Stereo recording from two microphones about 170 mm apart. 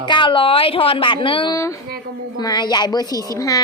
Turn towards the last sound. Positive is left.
turn(degrees=20)  # may be behind; listen again after turning